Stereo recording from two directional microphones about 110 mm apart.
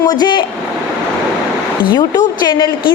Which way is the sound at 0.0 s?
40° left (ahead or behind).